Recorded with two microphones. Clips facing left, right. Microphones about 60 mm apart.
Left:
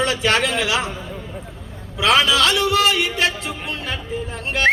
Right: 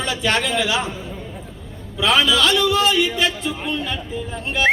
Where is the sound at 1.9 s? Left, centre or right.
Left.